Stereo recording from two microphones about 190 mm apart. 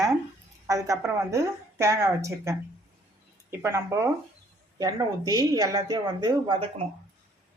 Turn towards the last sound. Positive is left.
turn(degrees=-25)  # may be behind; listen again after turning